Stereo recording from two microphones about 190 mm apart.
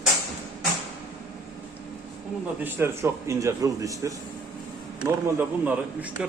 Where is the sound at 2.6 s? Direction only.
10° right (ahead or behind).